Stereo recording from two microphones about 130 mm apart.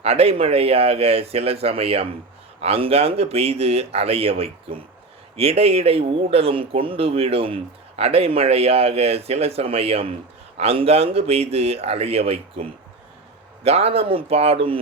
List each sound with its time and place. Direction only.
0.0 s speech: 50° right (ahead or behind)
13.7 s speech: 50° right (ahead or behind)